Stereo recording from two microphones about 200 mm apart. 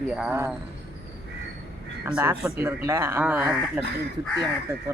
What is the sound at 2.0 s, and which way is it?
Speech, 10° right (ahead or behind).